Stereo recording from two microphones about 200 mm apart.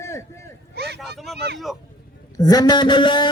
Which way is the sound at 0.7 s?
55° right (ahead or behind).